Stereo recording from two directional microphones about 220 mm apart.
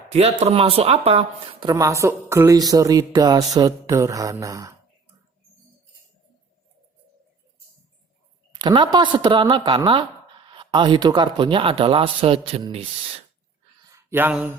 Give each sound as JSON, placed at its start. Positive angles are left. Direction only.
{"t": 0.1, "sound": "speech", "side_deg": -25}
{"t": 1.7, "sound": "speech", "side_deg": -15}
{"t": 8.5, "sound": "speech", "side_deg": -20}
{"t": 13.8, "sound": "a sound", "side_deg": -10}